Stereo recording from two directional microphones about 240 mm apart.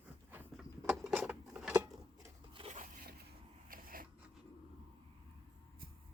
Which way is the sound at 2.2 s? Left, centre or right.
Right.